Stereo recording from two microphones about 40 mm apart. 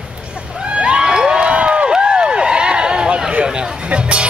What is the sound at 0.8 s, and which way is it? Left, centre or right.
Crowd, right.